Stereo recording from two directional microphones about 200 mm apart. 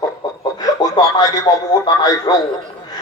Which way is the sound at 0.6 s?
20° left (ahead or behind).